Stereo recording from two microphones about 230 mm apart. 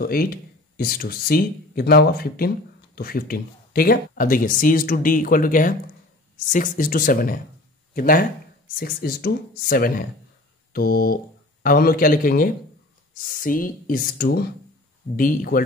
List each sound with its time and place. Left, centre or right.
0.0 s speech: left